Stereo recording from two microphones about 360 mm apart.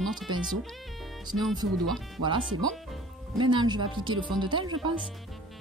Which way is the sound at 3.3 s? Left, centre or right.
Centre.